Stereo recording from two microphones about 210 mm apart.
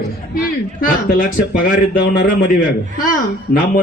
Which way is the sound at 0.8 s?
40° left (ahead or behind).